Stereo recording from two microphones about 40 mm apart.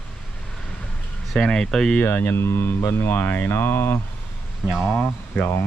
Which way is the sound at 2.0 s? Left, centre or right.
Left.